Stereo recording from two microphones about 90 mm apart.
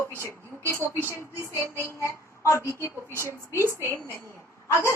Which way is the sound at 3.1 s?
30° right (ahead or behind).